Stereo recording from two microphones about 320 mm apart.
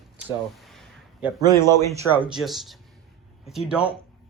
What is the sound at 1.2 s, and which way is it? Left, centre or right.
A man's voice, centre.